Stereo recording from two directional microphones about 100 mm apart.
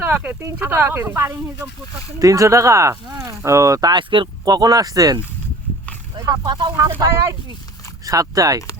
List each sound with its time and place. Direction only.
0.0 s speech: 20° right (ahead or behind); by 4.3 s 55° right (ahead or behind)
4.4 s speech: 40° right (ahead or behind)
7.0 s speech: 30° right (ahead or behind)